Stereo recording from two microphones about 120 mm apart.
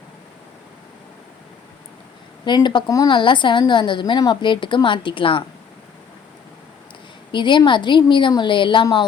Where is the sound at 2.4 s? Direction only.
40° left (ahead or behind).